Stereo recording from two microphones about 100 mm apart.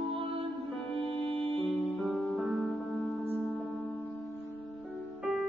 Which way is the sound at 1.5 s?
Centre (ahead or behind).